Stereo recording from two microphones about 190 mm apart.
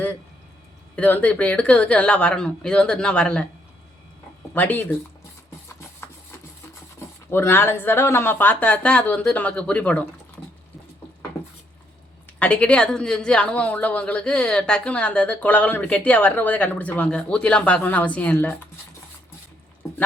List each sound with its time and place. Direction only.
0.9 s speech: 10° left (ahead or behind)
4.5 s speech: 10° left (ahead or behind)
7.3 s speech: 10° left (ahead or behind)
11.3 s dishes: 15° left (ahead or behind)
12.4 s speech: 5° left (ahead or behind)